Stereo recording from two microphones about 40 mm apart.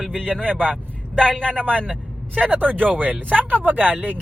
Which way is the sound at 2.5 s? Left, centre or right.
Right.